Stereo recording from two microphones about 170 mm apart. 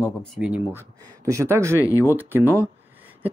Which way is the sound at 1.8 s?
15° left (ahead or behind).